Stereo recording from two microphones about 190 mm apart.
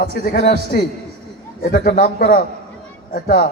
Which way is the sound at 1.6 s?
45° left (ahead or behind).